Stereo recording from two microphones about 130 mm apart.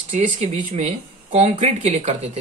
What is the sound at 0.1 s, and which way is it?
A man's voice, 60° right (ahead or behind).